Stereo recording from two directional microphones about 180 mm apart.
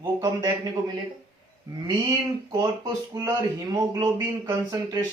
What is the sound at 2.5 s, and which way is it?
A man's voice, 20° right (ahead or behind).